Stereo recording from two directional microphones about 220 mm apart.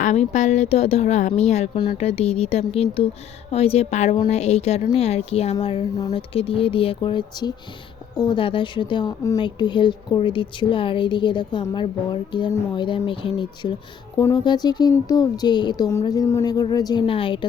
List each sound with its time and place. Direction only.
0.0 s speech: 30° left (ahead or behind)